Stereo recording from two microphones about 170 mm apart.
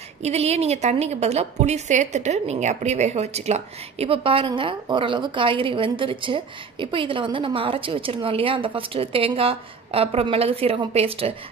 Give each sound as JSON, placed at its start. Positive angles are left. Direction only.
{"t": 0.2, "sound": "a woman's voice", "side_deg": -40}